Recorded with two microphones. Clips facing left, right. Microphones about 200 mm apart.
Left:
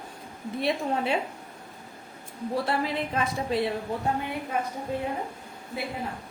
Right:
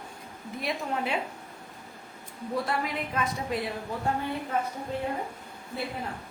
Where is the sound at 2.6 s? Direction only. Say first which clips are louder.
Left 3 dB; 30° left (ahead or behind).